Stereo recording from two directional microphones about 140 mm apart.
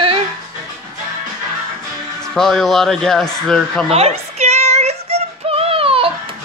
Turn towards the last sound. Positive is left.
turn(degrees=-40)  # may be behind; listen again after turning